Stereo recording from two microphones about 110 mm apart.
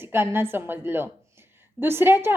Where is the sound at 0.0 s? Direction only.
20° right (ahead or behind).